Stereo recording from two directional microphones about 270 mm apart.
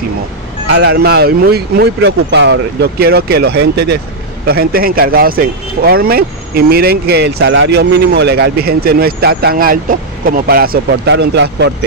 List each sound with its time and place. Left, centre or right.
0.7 s speech: right